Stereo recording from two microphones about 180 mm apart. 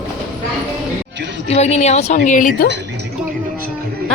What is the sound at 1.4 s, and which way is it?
A woman's voice, 35° left (ahead or behind).